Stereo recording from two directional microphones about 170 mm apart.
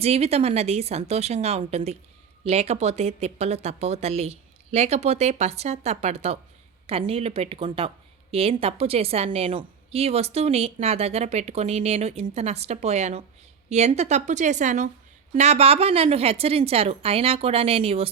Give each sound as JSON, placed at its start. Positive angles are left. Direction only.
{"t": 0.0, "sound": "a woman's voice", "side_deg": -35}